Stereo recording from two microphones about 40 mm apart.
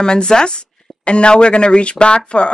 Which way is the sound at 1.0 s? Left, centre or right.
Left.